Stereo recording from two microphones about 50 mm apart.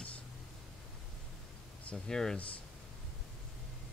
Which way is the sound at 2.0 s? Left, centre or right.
Centre.